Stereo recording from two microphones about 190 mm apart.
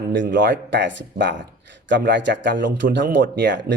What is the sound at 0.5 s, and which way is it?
A man's voice, 70° right (ahead or behind).